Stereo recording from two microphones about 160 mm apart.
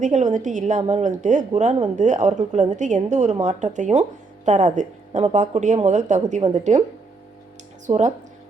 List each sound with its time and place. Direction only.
0.0 s a woman's voice: 50° right (ahead or behind)
7.9 s a woman's voice: 50° right (ahead or behind)